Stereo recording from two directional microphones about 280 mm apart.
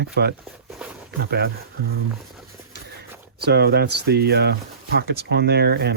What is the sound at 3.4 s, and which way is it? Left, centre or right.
Speech, right.